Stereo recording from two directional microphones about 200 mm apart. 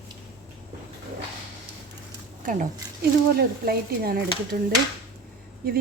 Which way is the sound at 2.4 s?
40° right (ahead or behind).